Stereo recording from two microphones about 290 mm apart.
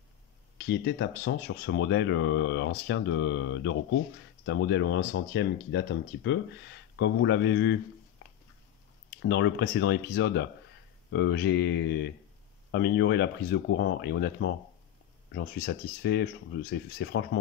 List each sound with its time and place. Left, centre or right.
0.7 s speech: left
9.2 s speech: left